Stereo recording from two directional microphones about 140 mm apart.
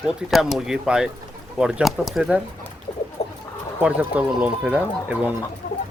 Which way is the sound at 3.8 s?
10° right (ahead or behind).